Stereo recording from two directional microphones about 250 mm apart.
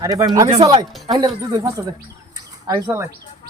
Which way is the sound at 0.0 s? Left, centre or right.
Centre.